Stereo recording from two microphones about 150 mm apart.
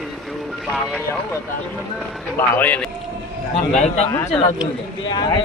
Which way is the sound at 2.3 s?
10° left (ahead or behind).